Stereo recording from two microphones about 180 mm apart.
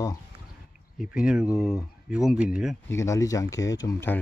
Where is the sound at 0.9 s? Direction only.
5° right (ahead or behind).